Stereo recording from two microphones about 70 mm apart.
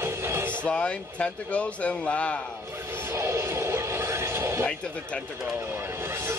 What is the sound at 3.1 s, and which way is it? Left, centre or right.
Music, right.